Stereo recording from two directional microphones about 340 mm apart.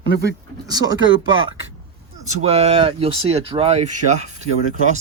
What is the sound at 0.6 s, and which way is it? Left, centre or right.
Speech, centre.